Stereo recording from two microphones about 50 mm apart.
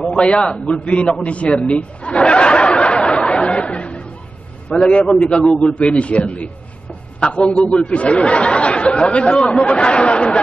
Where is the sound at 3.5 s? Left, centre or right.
Left.